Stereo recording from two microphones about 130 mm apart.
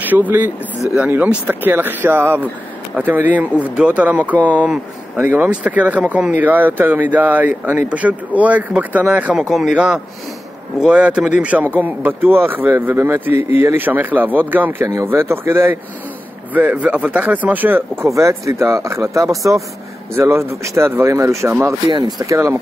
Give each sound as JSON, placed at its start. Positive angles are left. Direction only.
{"t": 0.0, "sound": "speech", "side_deg": -15}